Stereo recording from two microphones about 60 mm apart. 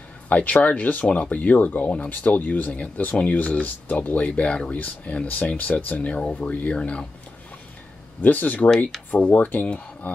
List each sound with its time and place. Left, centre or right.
0.3 s speech: left
8.2 s speech: left